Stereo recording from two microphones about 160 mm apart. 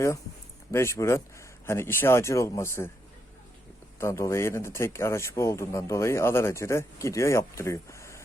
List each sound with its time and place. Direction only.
0.7 s speech: 15° left (ahead or behind)
4.0 s speech: 15° left (ahead or behind)